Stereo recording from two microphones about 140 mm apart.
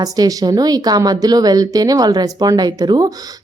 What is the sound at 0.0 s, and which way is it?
Speech, 25° right (ahead or behind).